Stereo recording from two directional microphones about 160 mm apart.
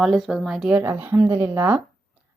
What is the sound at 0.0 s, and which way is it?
A woman's voice, centre (ahead or behind).